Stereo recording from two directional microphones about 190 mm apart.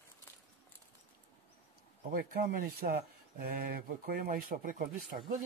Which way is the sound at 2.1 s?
50° right (ahead or behind).